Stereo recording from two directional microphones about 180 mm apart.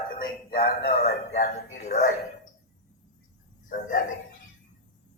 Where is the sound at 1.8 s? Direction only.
40° left (ahead or behind).